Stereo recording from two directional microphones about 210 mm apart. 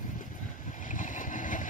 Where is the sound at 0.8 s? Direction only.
40° left (ahead or behind).